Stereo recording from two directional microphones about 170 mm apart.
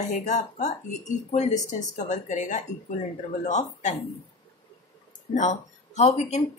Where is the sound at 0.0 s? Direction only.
45° left (ahead or behind).